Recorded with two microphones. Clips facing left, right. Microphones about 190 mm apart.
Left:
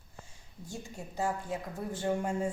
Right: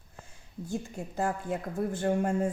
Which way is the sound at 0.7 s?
55° right (ahead or behind).